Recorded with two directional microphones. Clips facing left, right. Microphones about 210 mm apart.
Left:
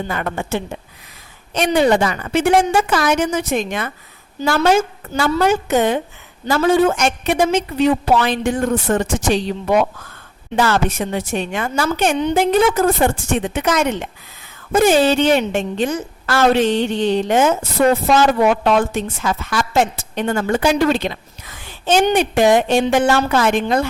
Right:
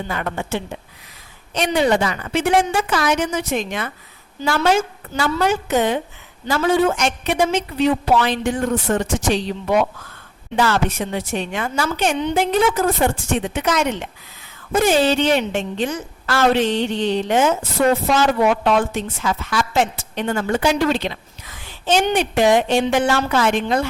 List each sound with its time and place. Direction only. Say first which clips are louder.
0.1 s a woman's voice: even; 50° left (ahead or behind)